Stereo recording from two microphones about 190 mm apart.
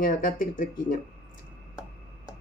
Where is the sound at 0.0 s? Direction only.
45° left (ahead or behind).